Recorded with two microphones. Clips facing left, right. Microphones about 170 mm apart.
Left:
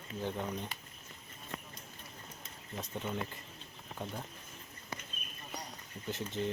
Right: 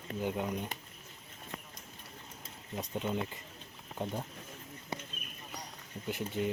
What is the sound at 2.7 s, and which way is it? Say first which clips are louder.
Speech: right 4 dB; 15° right (ahead or behind).